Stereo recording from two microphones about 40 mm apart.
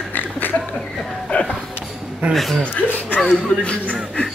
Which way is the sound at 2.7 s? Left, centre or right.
Left.